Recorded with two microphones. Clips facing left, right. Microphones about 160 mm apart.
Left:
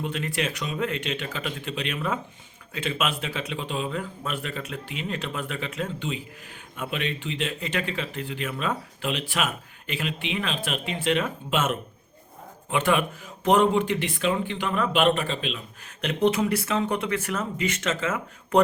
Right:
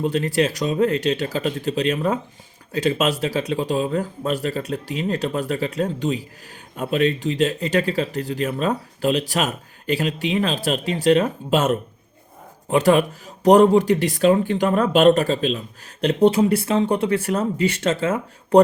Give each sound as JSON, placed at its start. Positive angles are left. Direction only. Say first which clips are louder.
{"t": 0.0, "sound": "speech", "louder": "right 9 dB", "side_deg": -35}